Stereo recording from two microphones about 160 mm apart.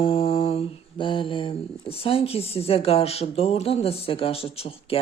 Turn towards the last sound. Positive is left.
turn(degrees=35)  # may be behind; listen again after turning